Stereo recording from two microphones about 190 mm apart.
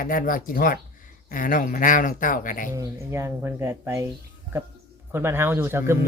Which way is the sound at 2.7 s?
15° right (ahead or behind).